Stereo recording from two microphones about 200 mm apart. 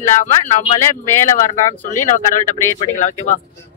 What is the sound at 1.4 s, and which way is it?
Speech, 40° left (ahead or behind).